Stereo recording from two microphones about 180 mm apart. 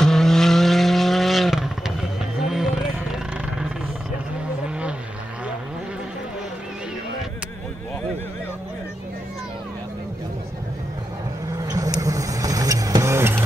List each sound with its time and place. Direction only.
0.0 s vehicle: centre (ahead or behind)
11.6 s vehicle: 20° right (ahead or behind)